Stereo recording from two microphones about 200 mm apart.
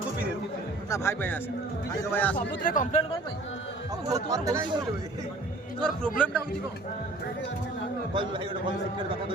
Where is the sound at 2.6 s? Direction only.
40° left (ahead or behind).